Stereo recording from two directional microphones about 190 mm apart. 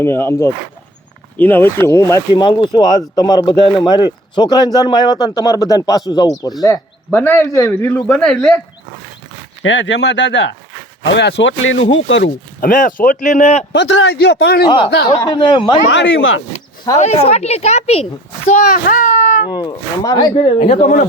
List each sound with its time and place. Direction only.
0.0 s a man's voice: 15° left (ahead or behind)
2.3 s a man's voice: 25° left (ahead or behind); by 8.6 s 10° left (ahead or behind)
9.6 s speech: 70° left (ahead or behind)
12.5 s speech: 45° left (ahead or behind)
13.7 s speech: 70° left (ahead or behind); by 14.7 s 55° left (ahead or behind)
15.2 s speech: 25° left (ahead or behind)
15.9 s speech: 75° left (ahead or behind)
17.0 s a child's voice: 35° left (ahead or behind)
19.5 s speech: 20° left (ahead or behind)
20.6 s speech: 40° left (ahead or behind)